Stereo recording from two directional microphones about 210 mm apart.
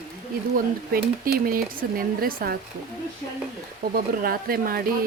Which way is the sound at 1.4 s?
45° right (ahead or behind).